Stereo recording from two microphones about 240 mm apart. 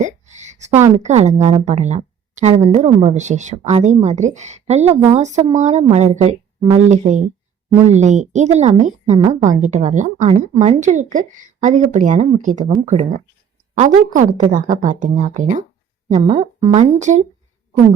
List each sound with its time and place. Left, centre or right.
0.0 s a sound: right
0.7 s a woman's voice: centre
1.0 s a woman's voice: right